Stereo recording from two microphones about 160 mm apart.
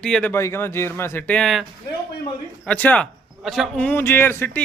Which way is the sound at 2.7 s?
10° left (ahead or behind).